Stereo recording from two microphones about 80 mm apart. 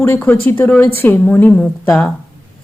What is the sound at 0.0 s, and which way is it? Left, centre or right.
Speech, left.